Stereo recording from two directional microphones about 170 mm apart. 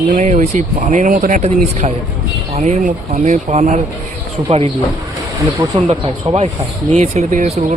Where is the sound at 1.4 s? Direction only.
40° right (ahead or behind).